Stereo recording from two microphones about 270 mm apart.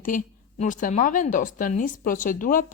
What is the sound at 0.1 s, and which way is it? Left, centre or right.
A woman's voice, left.